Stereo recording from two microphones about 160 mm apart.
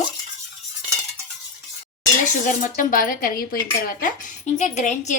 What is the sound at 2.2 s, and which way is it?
Speech, 50° left (ahead or behind).